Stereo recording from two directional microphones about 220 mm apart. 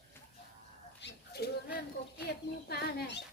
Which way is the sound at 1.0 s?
45° left (ahead or behind).